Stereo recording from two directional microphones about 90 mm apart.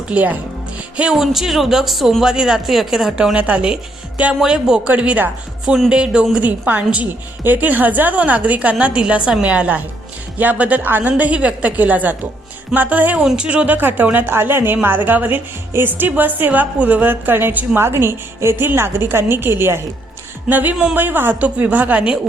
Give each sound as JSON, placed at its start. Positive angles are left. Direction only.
{"t": 0.1, "sound": "a woman's voice", "side_deg": -15}
{"t": 0.9, "sound": "a woman's voice", "side_deg": -5}
{"t": 5.6, "sound": "a woman's voice", "side_deg": -5}